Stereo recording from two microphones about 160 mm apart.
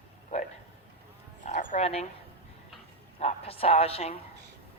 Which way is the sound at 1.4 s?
55° left (ahead or behind).